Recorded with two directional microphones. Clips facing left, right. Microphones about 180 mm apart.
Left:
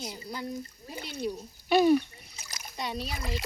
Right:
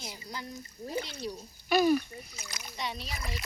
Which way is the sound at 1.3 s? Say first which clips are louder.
Left 7 dB; 25° left (ahead or behind).